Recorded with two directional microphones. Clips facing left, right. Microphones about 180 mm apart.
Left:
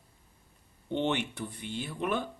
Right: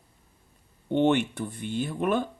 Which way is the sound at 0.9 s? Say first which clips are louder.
Right 8 dB; 50° right (ahead or behind).